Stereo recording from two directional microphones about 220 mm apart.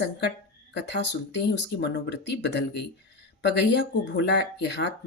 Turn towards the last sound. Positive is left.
turn(degrees=50)  # may be behind; listen again after turning